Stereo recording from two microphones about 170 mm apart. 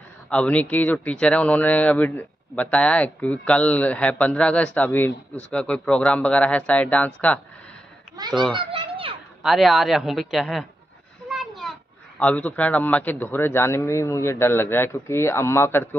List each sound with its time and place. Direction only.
0.3 s speech: 5° left (ahead or behind)
8.5 s a child's voice: 30° right (ahead or behind)
9.4 s a man's voice: centre (ahead or behind)
11.2 s a sound: centre (ahead or behind)
12.2 s speech: 10° left (ahead or behind)